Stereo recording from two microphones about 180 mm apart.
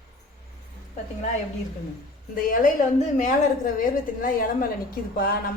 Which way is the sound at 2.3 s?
50° left (ahead or behind).